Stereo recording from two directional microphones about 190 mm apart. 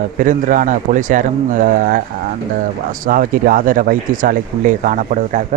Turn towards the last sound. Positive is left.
turn(degrees=-40)  # may be behind; listen again after turning